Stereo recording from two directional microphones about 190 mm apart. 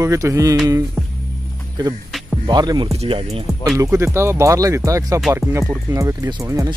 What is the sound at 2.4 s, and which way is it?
Speech, 20° right (ahead or behind).